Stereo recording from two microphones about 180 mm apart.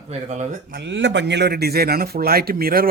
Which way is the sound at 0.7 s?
80° right.